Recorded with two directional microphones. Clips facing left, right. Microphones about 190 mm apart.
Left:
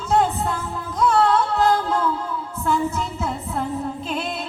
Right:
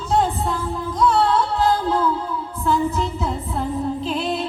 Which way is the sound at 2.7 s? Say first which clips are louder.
Right 2 dB; 50° left (ahead or behind).